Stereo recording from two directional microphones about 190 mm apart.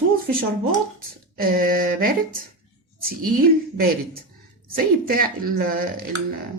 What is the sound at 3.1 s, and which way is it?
A woman's voice, 50° right (ahead or behind).